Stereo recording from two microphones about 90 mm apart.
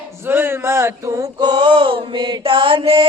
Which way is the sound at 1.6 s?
75° right (ahead or behind).